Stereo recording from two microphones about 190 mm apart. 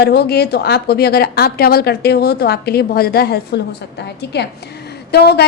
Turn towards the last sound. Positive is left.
turn(degrees=60)  # may be behind; listen again after turning